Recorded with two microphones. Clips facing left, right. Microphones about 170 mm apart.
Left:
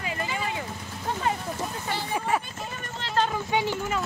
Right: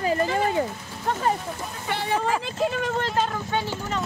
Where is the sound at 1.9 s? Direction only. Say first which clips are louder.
Right 7 dB; 70° right (ahead or behind).